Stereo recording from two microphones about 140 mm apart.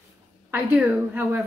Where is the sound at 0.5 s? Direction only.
15° right (ahead or behind).